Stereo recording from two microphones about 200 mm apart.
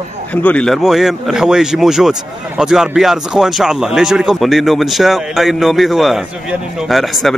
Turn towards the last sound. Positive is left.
turn(degrees=0)  # may be behind; listen again after turning